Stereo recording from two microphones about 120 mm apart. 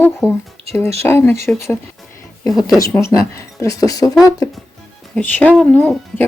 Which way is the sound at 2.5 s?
30° left (ahead or behind).